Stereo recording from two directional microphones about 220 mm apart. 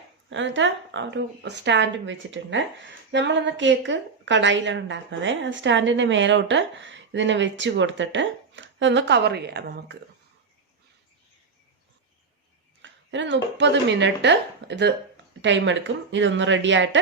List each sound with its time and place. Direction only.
0.3 s a woman's voice: 55° right (ahead or behind)
12.8 s a woman's voice: 55° right (ahead or behind)